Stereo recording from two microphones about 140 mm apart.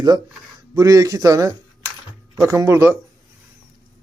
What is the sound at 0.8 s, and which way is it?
A man's voice, 25° right (ahead or behind).